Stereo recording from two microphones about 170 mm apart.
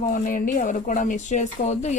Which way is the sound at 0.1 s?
55° left (ahead or behind).